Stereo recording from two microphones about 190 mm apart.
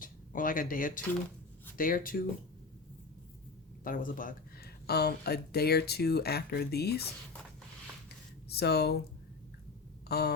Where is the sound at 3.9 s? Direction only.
45° left (ahead or behind).